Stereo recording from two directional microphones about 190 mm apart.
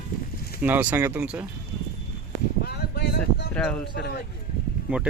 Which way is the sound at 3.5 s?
5° left (ahead or behind).